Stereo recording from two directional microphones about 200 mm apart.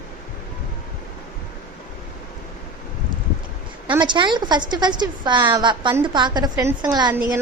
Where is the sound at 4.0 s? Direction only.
25° right (ahead or behind).